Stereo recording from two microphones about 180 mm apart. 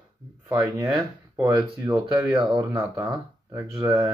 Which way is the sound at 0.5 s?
15° right (ahead or behind).